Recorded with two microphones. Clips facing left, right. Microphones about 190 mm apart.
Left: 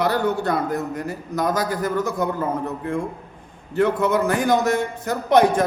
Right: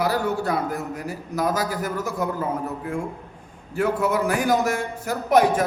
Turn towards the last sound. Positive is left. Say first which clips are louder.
# left 2 dB
turn(degrees=-5)  # may be behind; listen again after turning